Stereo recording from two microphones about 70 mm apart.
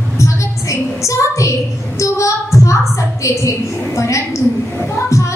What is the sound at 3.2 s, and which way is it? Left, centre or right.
A woman's voice, left.